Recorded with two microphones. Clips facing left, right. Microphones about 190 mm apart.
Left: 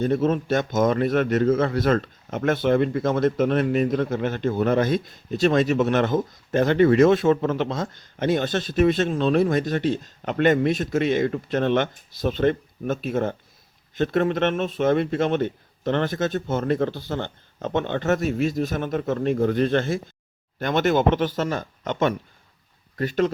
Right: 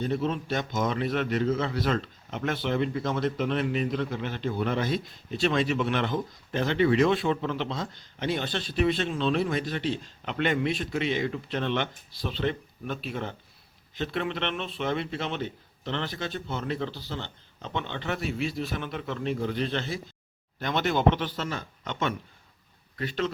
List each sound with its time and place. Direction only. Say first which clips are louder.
0.0 s a man's voice: left 7 dB; 50° left (ahead or behind)